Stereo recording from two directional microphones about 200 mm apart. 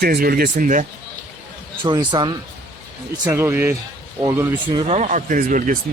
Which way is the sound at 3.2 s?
10° right (ahead or behind).